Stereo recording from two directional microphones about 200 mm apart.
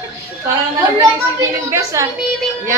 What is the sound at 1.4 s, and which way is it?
Speech, 15° right (ahead or behind).